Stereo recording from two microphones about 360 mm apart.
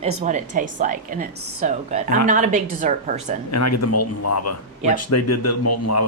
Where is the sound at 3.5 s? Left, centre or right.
Left.